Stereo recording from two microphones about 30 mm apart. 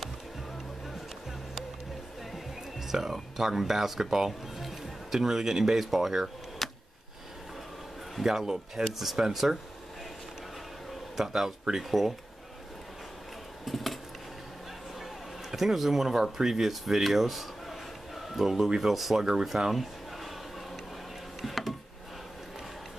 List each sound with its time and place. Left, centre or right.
2.9 s speech: centre
4.6 s music: centre
5.2 s speech: centre
6.6 s a sound: centre
8.2 s speech: centre
11.1 s speech: centre
13.7 s a sound: centre
15.5 s speech: centre
19.1 s speech: centre
19.7 s a sound: centre